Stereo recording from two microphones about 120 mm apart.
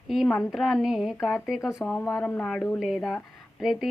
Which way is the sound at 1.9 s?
10° left (ahead or behind).